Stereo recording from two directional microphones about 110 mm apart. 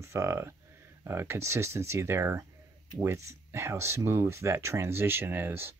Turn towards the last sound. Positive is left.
turn(degrees=-20)  # may be behind; listen again after turning